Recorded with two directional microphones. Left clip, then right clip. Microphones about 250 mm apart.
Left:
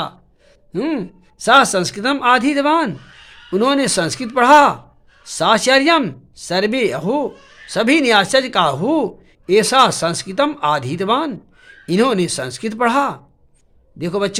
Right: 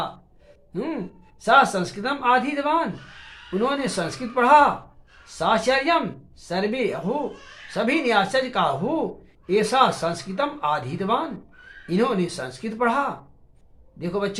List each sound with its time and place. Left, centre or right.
0.7 s speech: left